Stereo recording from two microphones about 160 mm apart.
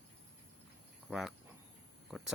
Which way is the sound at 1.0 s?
Centre (ahead or behind).